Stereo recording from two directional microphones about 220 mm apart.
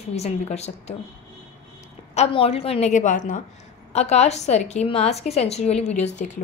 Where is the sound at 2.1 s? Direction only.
25° left (ahead or behind).